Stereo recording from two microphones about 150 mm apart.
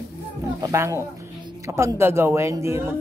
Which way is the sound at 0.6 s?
20° right (ahead or behind).